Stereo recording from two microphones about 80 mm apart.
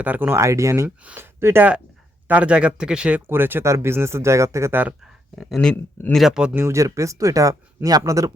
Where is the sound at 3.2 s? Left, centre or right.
Right.